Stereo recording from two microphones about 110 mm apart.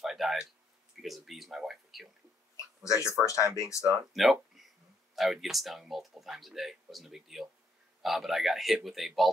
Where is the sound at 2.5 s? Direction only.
30° left (ahead or behind).